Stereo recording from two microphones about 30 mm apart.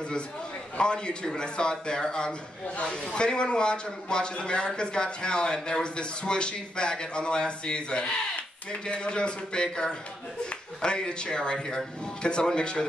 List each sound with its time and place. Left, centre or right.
0.7 s a man's voice: left
2.8 s a man's voice: left